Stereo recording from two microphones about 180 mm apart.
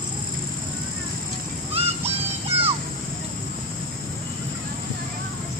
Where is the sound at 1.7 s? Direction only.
35° right (ahead or behind).